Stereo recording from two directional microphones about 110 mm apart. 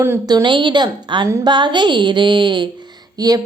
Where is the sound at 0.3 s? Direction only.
40° right (ahead or behind).